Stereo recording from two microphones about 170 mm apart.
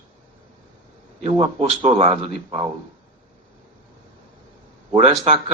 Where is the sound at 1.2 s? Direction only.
35° right (ahead or behind).